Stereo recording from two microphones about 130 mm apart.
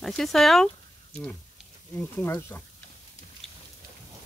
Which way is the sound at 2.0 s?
15° left (ahead or behind).